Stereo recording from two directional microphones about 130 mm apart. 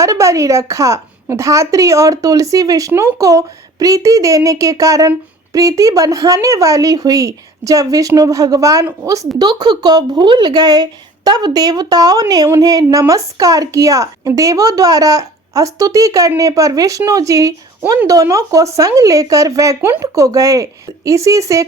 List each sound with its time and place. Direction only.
0.0 s a woman's voice: 25° right (ahead or behind)